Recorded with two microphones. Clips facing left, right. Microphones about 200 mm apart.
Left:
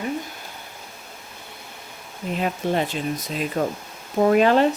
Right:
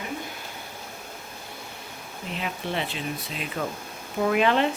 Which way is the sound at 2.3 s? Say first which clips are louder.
Left 7 dB; 45° left (ahead or behind).